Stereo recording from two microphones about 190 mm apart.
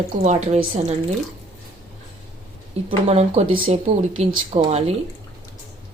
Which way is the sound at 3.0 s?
35° right (ahead or behind).